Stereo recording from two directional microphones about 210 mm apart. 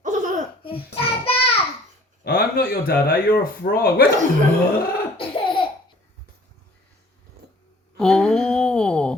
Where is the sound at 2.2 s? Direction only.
45° left (ahead or behind).